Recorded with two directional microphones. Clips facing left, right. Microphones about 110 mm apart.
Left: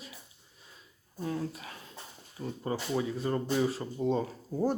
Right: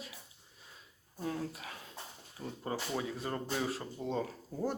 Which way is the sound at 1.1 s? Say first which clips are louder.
Left 3 dB; centre (ahead or behind).